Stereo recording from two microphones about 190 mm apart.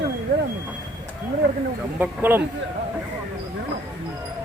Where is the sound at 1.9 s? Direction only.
10° right (ahead or behind).